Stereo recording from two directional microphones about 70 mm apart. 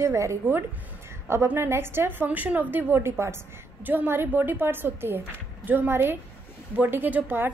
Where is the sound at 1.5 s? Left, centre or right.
Right.